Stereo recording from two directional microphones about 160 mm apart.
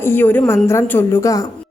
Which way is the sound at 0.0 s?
10° left (ahead or behind).